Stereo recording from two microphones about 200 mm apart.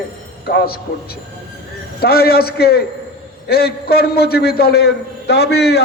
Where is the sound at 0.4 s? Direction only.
50° left (ahead or behind).